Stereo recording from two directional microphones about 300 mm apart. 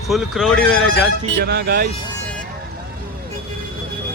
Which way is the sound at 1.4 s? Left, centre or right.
Right.